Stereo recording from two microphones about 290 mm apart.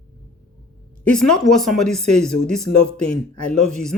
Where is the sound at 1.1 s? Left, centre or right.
Centre.